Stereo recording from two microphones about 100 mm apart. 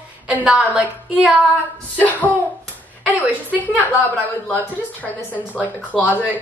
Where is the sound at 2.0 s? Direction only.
15° left (ahead or behind).